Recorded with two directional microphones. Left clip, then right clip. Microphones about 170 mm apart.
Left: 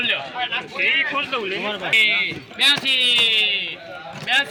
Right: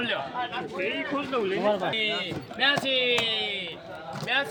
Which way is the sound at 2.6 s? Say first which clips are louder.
Left 7 dB; 40° right (ahead or behind).